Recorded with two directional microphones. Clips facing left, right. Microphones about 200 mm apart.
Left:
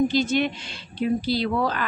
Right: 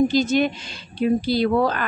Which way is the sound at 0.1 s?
40° right (ahead or behind).